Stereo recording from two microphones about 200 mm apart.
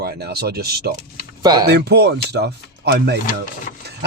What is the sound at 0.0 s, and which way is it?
Speech, 50° right (ahead or behind).